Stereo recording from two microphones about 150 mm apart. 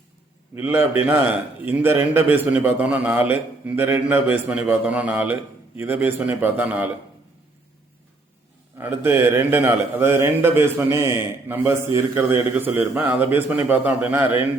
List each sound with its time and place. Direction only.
0.5 s a man's voice: 15° right (ahead or behind)
8.8 s a man's voice: 15° right (ahead or behind)